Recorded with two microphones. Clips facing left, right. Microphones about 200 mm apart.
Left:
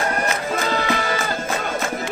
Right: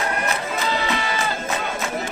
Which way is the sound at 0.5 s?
50° left (ahead or behind).